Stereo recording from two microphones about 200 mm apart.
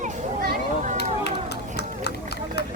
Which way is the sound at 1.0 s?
55° left (ahead or behind).